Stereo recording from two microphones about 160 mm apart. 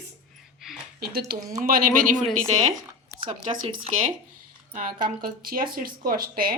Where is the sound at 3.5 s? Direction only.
40° right (ahead or behind).